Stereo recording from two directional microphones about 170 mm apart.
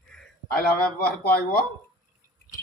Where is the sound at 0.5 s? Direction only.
60° left (ahead or behind).